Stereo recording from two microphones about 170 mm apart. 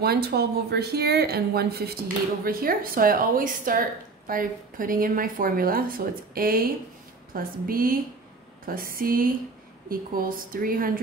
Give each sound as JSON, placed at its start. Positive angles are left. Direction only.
{"t": 0.0, "sound": "a woman's voice", "side_deg": -70}